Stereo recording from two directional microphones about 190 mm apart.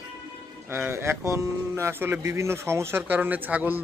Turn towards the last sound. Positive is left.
turn(degrees=-10)  # may be behind; listen again after turning